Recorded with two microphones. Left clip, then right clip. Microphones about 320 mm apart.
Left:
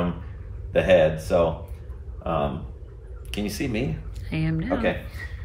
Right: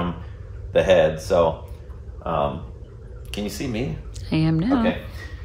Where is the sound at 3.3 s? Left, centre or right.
Centre.